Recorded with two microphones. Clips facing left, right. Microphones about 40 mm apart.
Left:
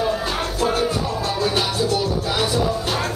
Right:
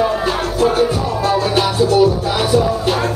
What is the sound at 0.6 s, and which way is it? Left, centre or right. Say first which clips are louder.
Music: right 6 dB; centre.